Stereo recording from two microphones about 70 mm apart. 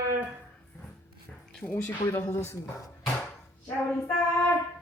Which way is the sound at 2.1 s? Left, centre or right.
Left.